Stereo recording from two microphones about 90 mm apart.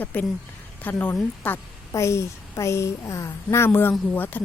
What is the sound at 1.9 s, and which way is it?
A woman's voice, 35° left (ahead or behind).